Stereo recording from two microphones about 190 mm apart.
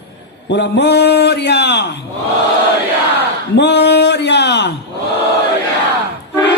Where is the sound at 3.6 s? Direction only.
65° left (ahead or behind).